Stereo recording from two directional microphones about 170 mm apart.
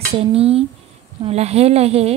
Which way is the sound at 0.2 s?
35° right (ahead or behind).